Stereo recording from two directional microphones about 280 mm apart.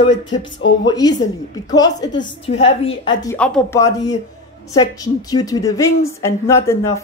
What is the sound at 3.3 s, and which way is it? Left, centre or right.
A woman's voice, centre.